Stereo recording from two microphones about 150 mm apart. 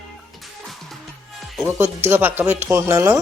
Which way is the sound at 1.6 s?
15° right (ahead or behind).